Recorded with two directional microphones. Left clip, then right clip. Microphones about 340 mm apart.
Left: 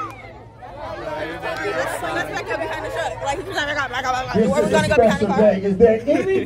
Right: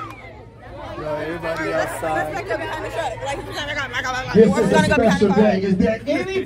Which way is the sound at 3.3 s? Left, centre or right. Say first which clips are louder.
Left 3 dB; centre.